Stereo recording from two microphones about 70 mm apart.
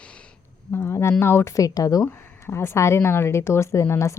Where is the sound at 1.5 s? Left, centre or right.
Left.